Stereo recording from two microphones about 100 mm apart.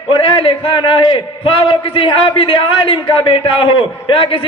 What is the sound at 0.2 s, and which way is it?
A man's voice, 60° left (ahead or behind).